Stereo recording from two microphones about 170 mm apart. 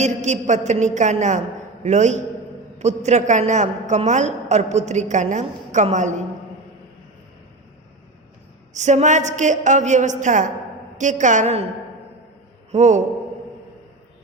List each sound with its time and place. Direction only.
0.0 s a woman's voice: 45° right (ahead or behind)
8.7 s a woman's voice: 45° right (ahead or behind)
12.7 s a woman's voice: 45° right (ahead or behind)